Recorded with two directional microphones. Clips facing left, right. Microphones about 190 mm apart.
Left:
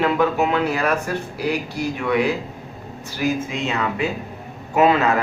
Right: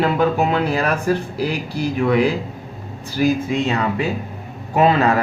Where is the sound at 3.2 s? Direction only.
35° right (ahead or behind).